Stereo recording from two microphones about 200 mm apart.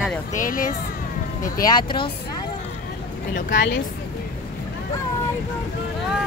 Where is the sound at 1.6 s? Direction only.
20° left (ahead or behind).